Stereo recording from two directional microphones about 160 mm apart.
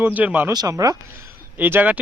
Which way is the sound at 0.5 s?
25° right (ahead or behind).